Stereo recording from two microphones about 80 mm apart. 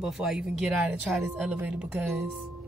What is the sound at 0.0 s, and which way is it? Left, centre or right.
Speech, centre.